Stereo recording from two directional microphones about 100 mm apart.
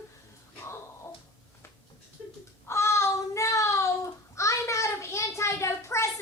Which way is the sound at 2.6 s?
25° left (ahead or behind).